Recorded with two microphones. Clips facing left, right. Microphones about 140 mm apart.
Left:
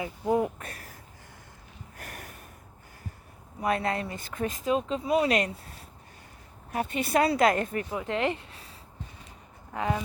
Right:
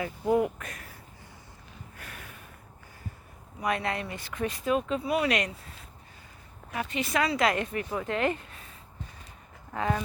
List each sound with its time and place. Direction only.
0.0 s a woman's voice: 25° left (ahead or behind)
2.0 s snort: 45° left (ahead or behind)
3.6 s speech: 30° left (ahead or behind)
4.3 s speech: 45° left (ahead or behind)
4.6 s speech: 25° left (ahead or behind)
6.7 s a woman's voice: 45° left (ahead or behind)
8.0 s speech: 25° left (ahead or behind)
9.7 s speech: 15° left (ahead or behind)